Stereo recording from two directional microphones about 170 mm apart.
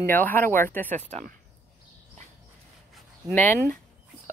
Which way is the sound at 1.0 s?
40° right (ahead or behind).